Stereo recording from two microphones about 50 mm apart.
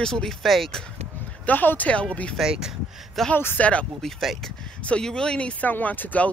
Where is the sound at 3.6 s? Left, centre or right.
Left.